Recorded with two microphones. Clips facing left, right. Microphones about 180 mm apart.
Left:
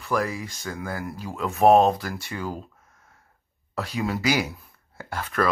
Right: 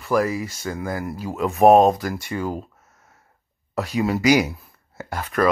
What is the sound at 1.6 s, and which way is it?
Speech, 45° right (ahead or behind).